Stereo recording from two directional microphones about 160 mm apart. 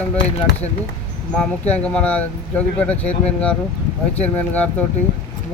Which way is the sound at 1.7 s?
10° left (ahead or behind).